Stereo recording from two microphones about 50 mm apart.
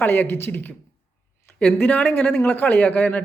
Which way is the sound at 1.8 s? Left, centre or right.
Left.